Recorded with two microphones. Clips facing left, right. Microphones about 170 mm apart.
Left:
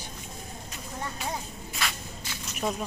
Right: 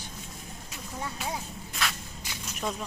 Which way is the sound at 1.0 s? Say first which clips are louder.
Even; 5° right (ahead or behind).